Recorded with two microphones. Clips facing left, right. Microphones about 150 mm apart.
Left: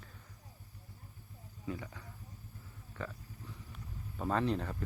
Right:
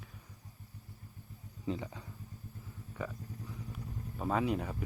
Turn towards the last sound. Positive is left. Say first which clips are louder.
# right 1 dB
turn(degrees=-10)  # may be behind; listen again after turning